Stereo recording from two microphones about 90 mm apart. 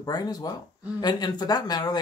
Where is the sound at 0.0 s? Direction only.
50° left (ahead or behind).